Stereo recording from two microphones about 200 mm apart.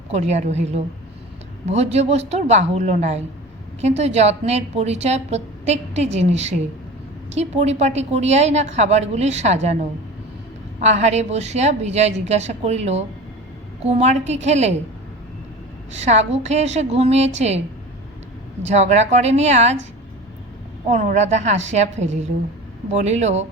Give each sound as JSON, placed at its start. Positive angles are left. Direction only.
{"t": 0.1, "sound": "a woman's voice", "side_deg": -35}
{"t": 10.8, "sound": "a woman's voice", "side_deg": -35}
{"t": 16.0, "sound": "a woman's voice", "side_deg": -35}
{"t": 18.6, "sound": "a woman's voice", "side_deg": -35}
{"t": 20.8, "sound": "a woman's voice", "side_deg": -35}